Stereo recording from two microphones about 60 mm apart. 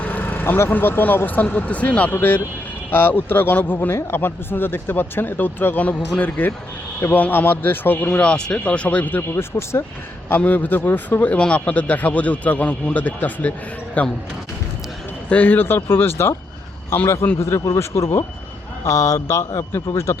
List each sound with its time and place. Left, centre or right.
0.0 s speech: left
2.9 s speech: left
8.1 s a man's voice: centre
9.3 s speech: left
10.2 s a man's voice: left
15.3 s speech: left
17.4 s a man's voice: left